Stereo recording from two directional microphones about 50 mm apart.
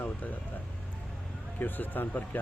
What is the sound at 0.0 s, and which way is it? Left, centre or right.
Music, left.